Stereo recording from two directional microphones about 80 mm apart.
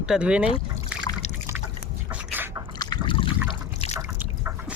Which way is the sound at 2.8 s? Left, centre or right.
Left.